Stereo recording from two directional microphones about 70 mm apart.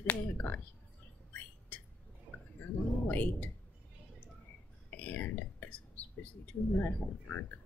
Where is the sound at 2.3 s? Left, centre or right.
Right.